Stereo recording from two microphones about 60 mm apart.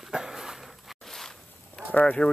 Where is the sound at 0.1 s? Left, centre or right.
Centre.